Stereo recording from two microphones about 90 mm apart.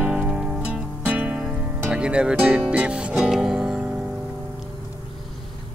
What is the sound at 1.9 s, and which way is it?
Speech, 10° right (ahead or behind).